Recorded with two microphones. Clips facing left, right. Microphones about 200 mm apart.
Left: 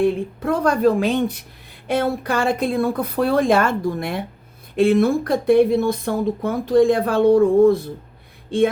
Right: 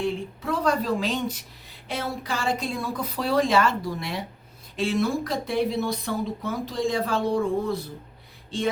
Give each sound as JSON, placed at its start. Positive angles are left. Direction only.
{"t": 0.0, "sound": "speech", "side_deg": 55}